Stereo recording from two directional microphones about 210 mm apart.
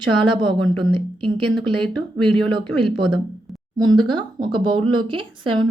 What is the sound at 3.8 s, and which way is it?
Speech, 90° right.